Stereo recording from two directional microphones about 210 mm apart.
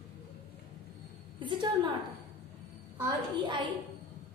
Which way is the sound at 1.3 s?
20° right (ahead or behind).